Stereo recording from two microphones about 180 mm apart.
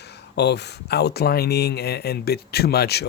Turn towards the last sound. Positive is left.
turn(degrees=65)  # may be behind; listen again after turning